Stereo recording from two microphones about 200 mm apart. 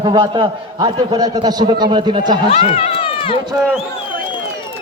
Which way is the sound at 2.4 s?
35° left (ahead or behind).